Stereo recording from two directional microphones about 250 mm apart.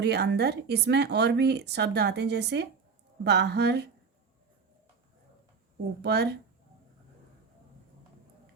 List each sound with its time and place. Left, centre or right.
0.0 s speech: right
6.0 s speech: right